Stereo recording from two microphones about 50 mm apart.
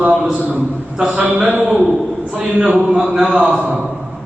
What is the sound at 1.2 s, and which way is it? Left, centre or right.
Speech, right.